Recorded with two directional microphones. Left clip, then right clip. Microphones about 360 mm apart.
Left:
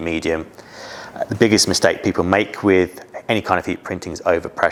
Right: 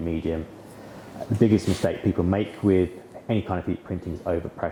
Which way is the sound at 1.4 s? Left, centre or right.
Centre.